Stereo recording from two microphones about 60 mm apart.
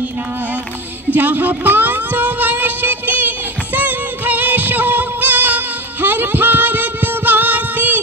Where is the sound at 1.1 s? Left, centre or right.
Right.